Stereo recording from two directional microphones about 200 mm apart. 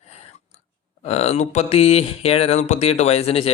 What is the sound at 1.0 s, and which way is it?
Speech, 30° left (ahead or behind).